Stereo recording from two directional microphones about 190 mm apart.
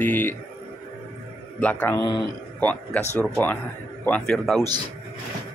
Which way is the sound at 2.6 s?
10° left (ahead or behind).